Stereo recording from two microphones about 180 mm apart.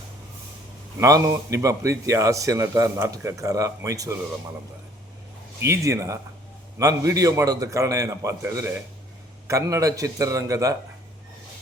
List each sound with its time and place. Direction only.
0.9 s a man's voice: 15° right (ahead or behind)
5.5 s a man's voice: 15° right (ahead or behind)